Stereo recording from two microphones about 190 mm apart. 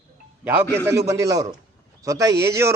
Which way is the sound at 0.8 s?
15° right (ahead or behind).